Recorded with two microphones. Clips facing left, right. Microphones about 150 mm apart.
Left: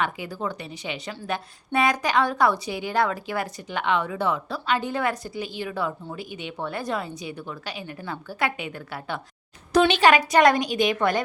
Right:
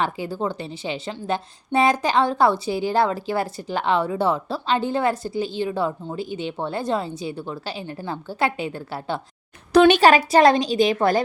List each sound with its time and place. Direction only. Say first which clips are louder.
0.0 s a woman's voice: right 3 dB; 30° right (ahead or behind)
9.7 s a woman's voice: right 4 dB; 50° right (ahead or behind); by 11.2 s 30° right (ahead or behind)